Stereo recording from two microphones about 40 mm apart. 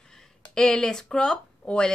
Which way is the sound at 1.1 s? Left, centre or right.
Left.